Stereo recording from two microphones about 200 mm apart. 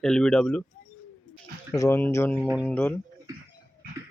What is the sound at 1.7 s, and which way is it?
Speech, 15° left (ahead or behind).